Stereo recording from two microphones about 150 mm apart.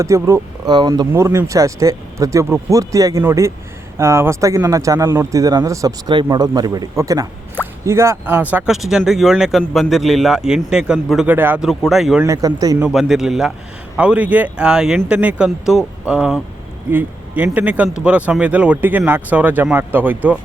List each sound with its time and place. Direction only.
0.0 s speech: 20° right (ahead or behind)
1.1 s speech: 15° right (ahead or behind); by 12.2 s centre (ahead or behind)
12.2 s speech: 20° right (ahead or behind)
12.9 s a man's voice: centre (ahead or behind)